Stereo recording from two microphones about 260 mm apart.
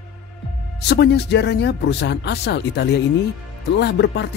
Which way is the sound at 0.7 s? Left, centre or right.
Left.